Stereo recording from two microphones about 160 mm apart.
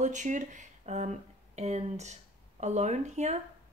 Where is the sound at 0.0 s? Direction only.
50° right (ahead or behind).